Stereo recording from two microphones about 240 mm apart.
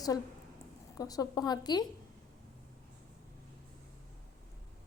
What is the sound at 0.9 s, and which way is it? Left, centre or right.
Speech, centre.